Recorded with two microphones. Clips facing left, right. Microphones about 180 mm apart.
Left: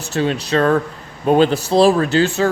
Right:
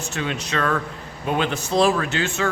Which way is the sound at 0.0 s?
35° left (ahead or behind).